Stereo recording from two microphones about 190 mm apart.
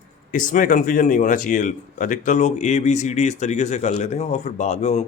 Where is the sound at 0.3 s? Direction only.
45° left (ahead or behind).